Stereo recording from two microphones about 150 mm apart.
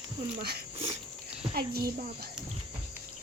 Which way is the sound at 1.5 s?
90° right.